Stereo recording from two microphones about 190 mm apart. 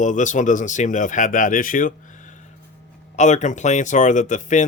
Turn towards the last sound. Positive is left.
turn(degrees=40)  # may be behind; listen again after turning